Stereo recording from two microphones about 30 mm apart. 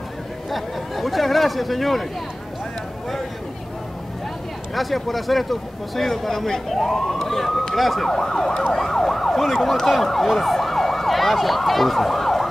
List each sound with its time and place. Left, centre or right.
0.5 s speech: centre
4.7 s speech: centre
8.1 s emergency vehicle: centre